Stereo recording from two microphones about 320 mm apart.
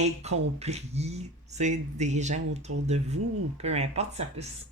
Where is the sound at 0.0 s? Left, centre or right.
Centre.